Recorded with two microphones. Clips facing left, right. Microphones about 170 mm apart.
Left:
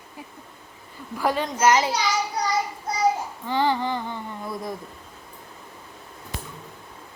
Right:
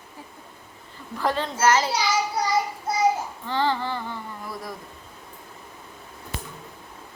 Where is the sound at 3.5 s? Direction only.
15° left (ahead or behind).